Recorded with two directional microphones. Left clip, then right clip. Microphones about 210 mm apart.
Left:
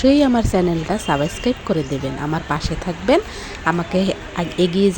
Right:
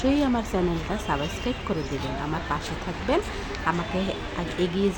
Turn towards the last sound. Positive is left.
turn(degrees=30)  # may be behind; listen again after turning